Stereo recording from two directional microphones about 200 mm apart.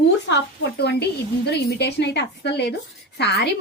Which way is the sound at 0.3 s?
55° left (ahead or behind).